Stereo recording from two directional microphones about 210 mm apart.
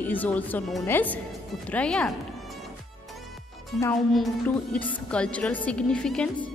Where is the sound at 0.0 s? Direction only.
10° left (ahead or behind).